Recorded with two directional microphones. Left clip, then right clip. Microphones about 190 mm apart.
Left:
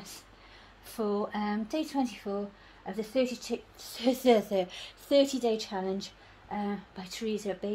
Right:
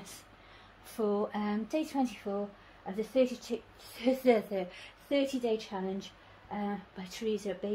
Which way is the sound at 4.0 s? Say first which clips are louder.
Left 2 dB; 45° left (ahead or behind).